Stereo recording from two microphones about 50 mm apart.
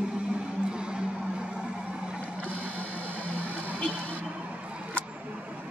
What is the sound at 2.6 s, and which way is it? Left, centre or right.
Vehicle, left.